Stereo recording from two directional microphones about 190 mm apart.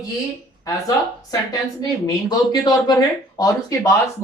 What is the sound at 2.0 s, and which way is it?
A woman's voice, 20° left (ahead or behind).